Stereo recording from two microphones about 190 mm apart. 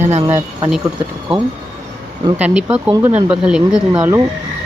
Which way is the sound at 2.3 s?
5° right (ahead or behind).